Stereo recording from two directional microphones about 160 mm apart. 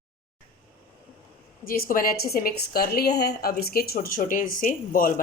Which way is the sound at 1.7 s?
65° left (ahead or behind).